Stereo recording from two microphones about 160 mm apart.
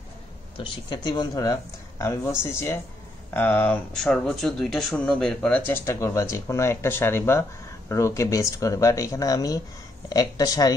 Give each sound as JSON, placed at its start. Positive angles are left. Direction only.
{"t": 0.6, "sound": "speech", "side_deg": 30}